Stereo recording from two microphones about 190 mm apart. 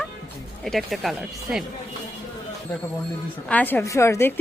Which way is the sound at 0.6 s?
Centre (ahead or behind).